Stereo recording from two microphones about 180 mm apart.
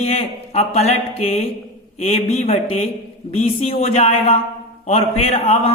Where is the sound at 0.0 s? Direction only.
35° left (ahead or behind).